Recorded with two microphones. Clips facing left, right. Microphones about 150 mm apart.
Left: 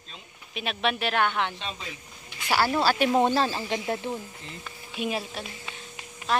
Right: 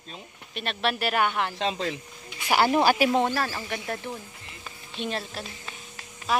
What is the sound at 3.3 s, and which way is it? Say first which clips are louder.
Speech: left 4 dB; 20° left (ahead or behind).